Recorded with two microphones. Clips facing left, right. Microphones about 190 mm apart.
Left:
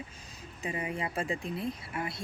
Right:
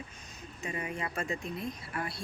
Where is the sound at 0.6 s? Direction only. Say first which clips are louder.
Left 2 dB; 25° left (ahead or behind).